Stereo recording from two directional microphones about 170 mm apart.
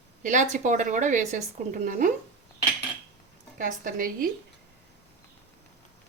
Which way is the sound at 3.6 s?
55° right (ahead or behind).